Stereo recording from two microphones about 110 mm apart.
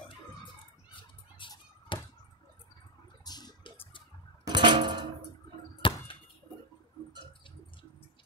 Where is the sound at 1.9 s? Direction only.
50° left (ahead or behind).